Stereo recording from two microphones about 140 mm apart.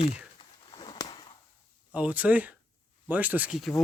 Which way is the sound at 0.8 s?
30° left (ahead or behind).